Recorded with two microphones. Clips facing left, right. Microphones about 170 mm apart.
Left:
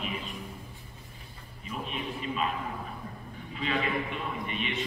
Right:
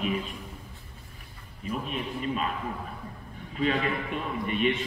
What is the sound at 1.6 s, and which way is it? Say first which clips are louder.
Speech: right 4 dB; 45° right (ahead or behind).